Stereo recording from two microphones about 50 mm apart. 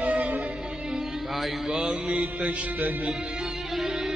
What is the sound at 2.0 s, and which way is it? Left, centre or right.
Mantra, right.